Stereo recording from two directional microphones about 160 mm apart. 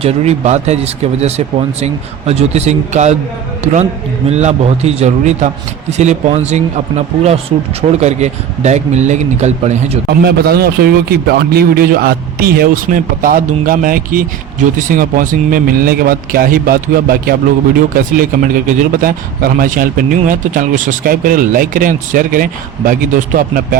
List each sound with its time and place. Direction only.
0.0 s speech: 40° right (ahead or behind)
4.3 s speech: 45° right (ahead or behind)
7.8 s speech: 45° right (ahead or behind)
10.1 s a man's voice: 75° right (ahead or behind); by 23.6 s 55° right (ahead or behind)